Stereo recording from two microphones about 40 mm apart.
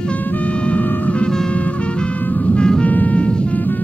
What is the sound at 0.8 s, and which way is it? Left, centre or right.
Music, left.